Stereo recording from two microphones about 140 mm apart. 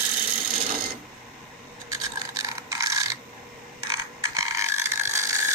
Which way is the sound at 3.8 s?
25° right (ahead or behind).